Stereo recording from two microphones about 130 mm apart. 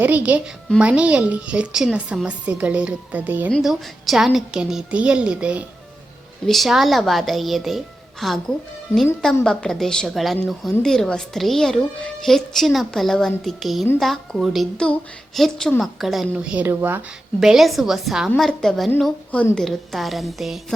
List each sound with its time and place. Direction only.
0.0 s a child's voice: 10° right (ahead or behind)
3.5 s a child's voice: centre (ahead or behind)
17.4 s a child's voice: centre (ahead or behind)